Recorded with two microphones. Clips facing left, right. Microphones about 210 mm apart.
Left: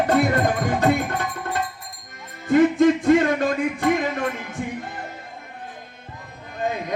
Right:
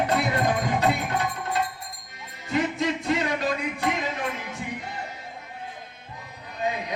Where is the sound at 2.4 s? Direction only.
50° left (ahead or behind).